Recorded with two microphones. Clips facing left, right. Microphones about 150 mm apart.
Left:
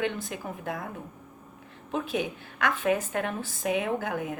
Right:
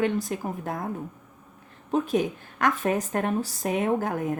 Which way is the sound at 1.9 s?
40° right (ahead or behind).